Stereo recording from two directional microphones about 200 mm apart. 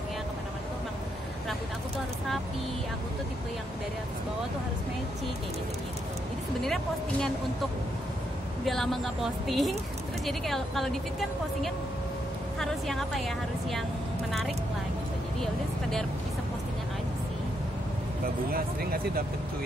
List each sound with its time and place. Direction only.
6.6 s speech: centre (ahead or behind)
8.6 s speech: centre (ahead or behind)
18.5 s speech: 50° right (ahead or behind)